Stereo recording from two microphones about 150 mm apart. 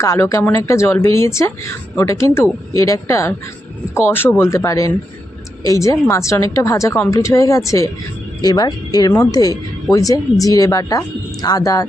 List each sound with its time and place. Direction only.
0.0 s speech: 20° left (ahead or behind)